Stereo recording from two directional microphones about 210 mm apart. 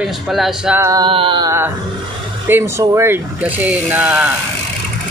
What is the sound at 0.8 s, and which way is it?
Mantra, 20° right (ahead or behind).